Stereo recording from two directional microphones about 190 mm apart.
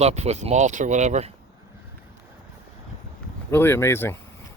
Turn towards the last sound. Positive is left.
turn(degrees=15)  # may be behind; listen again after turning